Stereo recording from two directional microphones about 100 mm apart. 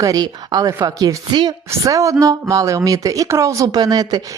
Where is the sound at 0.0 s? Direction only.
40° right (ahead or behind).